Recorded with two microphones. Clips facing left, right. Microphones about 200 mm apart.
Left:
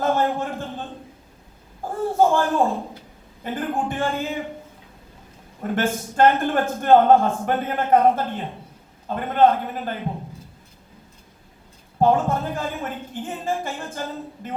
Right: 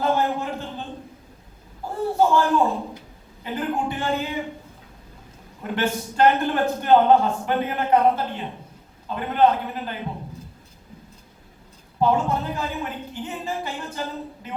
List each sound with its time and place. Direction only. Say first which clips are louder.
0.0 s a sound: left 1 dB; 45° left (ahead or behind)
3.4 s a man's voice: even; 50° left (ahead or behind)
5.6 s a man's voice: left 2 dB; 50° left (ahead or behind)
11.9 s a man's voice: left 2 dB; 50° left (ahead or behind)